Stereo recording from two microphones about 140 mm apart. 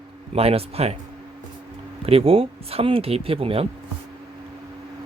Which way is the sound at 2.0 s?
45° right (ahead or behind).